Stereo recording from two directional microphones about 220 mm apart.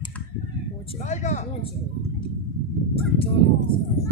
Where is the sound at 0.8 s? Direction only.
30° left (ahead or behind).